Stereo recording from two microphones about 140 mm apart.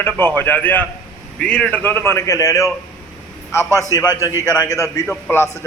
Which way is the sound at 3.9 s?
30° left (ahead or behind).